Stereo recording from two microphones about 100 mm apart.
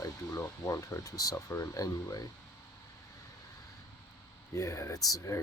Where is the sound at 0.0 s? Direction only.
35° left (ahead or behind).